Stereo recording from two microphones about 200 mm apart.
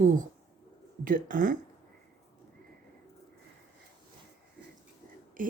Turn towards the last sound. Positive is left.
turn(degrees=-40)  # may be behind; listen again after turning